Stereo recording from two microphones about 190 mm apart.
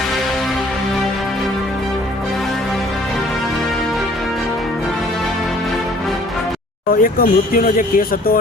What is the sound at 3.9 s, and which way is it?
Music, centre (ahead or behind).